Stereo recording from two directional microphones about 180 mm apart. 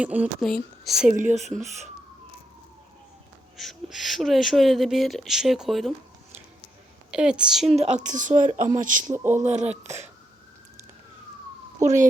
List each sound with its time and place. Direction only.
0.0 s speech: 5° right (ahead or behind)
1.1 s speech: 45° right (ahead or behind)
3.6 s speech: centre (ahead or behind)
7.1 s speech: 5° right (ahead or behind)
7.8 s speech: 40° right (ahead or behind)